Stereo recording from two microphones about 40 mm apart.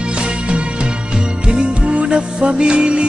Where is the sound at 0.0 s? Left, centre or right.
Right.